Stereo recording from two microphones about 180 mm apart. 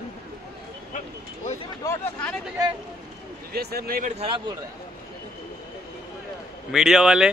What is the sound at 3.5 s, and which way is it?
Speech, 60° right (ahead or behind).